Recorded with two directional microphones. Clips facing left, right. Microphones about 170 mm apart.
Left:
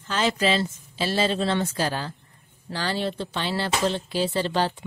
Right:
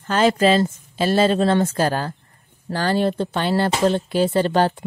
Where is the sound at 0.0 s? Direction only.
50° right (ahead or behind).